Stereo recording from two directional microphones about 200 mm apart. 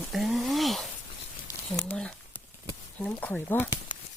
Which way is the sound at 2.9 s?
5° left (ahead or behind).